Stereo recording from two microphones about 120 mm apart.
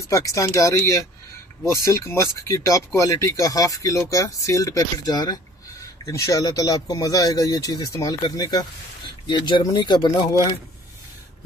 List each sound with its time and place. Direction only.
0.1 s speech: 25° left (ahead or behind)